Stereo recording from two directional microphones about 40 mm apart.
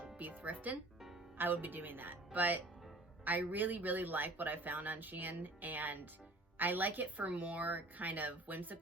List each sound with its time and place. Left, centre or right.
0.2 s speech: right